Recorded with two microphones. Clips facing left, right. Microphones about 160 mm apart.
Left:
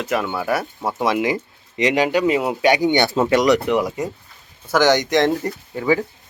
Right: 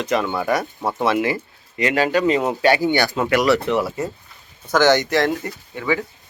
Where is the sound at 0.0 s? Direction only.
5° left (ahead or behind); by 6.1 s 35° left (ahead or behind).